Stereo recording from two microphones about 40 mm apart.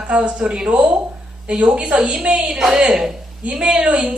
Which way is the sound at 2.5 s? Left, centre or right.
Centre.